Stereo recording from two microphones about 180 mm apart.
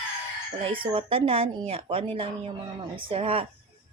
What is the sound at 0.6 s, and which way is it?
Speech, 30° right (ahead or behind).